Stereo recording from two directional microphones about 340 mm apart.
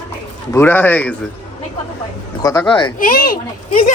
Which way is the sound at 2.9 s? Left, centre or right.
Left.